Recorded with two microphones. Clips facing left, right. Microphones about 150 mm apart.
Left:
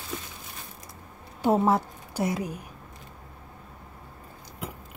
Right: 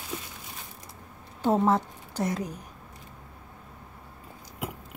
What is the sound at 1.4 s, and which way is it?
Speech, 10° left (ahead or behind).